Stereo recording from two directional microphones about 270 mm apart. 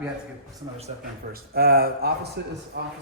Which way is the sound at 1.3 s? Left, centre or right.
Right.